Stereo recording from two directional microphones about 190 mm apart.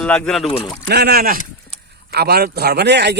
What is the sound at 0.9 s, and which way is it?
Speech, 55° right (ahead or behind).